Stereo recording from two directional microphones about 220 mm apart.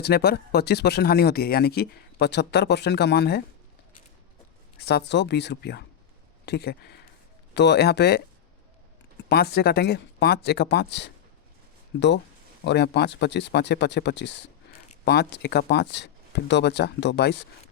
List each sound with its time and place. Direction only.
0.0 s speech: 45° left (ahead or behind)
4.8 s speech: 45° left (ahead or behind)
9.3 s speech: 45° left (ahead or behind)